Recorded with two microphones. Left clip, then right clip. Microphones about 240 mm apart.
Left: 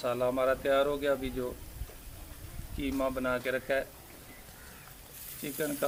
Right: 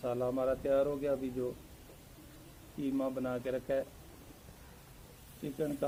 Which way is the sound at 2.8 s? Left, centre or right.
Right.